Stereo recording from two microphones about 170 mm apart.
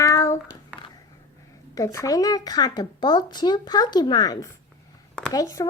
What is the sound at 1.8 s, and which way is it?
Speech, 20° left (ahead or behind).